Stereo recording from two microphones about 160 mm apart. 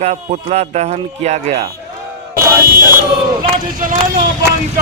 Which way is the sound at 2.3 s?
65° right (ahead or behind).